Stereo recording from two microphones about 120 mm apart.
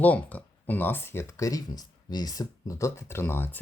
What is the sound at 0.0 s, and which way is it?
Speech, 15° left (ahead or behind).